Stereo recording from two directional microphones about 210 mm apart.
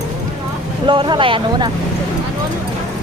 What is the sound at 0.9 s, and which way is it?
Speech, 25° right (ahead or behind).